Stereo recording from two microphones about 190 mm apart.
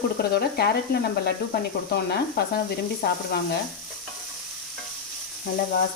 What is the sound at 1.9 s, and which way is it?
Speech, 55° left (ahead or behind).